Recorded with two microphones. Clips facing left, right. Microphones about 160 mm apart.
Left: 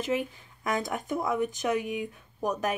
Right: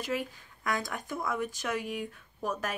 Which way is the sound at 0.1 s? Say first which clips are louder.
Left 4 dB; 20° left (ahead or behind).